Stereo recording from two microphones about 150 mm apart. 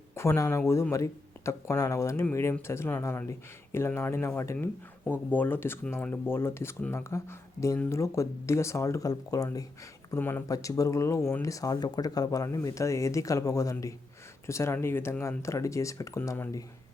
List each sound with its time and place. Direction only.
0.1 s speech: 20° left (ahead or behind)